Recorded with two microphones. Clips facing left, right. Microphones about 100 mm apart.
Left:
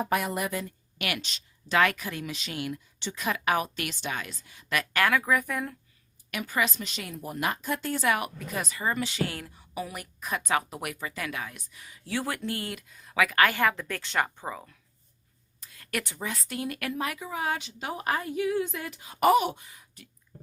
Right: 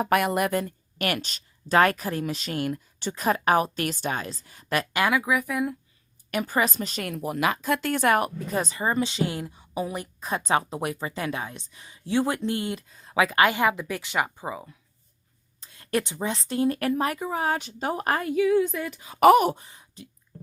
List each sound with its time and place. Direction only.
0.0 s speech: 65° right (ahead or behind); by 4.9 s 35° right (ahead or behind)
4.9 s speech: 15° right (ahead or behind)
6.3 s speech: 40° right (ahead or behind)
7.1 s speech: 90° right; by 8.3 s 50° right (ahead or behind)
8.4 s a woman's voice: 30° right (ahead or behind); by 14.8 s 10° right (ahead or behind)
15.6 s speech: 30° right (ahead or behind); by 18.3 s 50° right (ahead or behind)
19.4 s speech: 40° right (ahead or behind)